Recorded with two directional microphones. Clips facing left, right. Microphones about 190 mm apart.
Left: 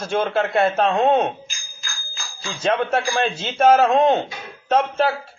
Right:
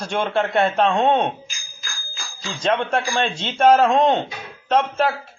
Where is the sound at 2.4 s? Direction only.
5° left (ahead or behind).